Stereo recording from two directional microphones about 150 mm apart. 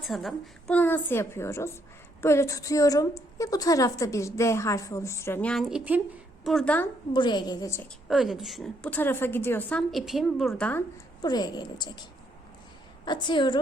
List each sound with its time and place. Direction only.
0.1 s a woman's voice: centre (ahead or behind)
0.8 s a woman's voice: 10° left (ahead or behind)
7.1 s a woman's voice: 30° left (ahead or behind)
8.0 s a woman's voice: 5° right (ahead or behind)
9.9 s a woman's voice: centre (ahead or behind)
10.9 s speech: 25° left (ahead or behind)
13.1 s a woman's voice: 30° left (ahead or behind)